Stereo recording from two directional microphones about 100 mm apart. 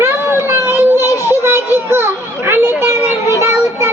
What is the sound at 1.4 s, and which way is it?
Children playing, 25° right (ahead or behind).